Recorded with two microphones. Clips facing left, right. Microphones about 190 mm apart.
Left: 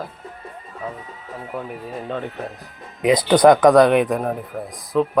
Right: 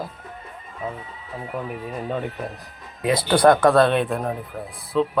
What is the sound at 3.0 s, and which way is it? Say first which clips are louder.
Speech: left 4 dB; 20° left (ahead or behind).